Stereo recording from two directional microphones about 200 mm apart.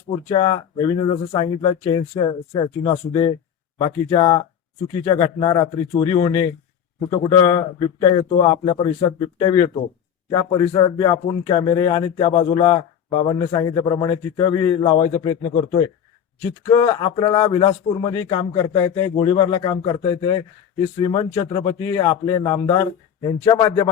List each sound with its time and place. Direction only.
0.3 s speech: 25° left (ahead or behind)